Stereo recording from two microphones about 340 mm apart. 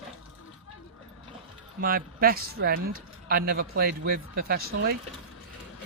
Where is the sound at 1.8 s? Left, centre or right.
Right.